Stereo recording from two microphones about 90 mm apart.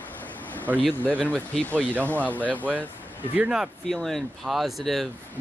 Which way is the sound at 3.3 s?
10° right (ahead or behind).